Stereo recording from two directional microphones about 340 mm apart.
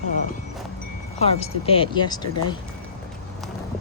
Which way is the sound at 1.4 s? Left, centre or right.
Centre.